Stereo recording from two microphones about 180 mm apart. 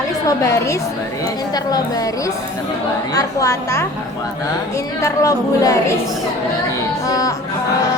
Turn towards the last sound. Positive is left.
turn(degrees=20)  # may be behind; listen again after turning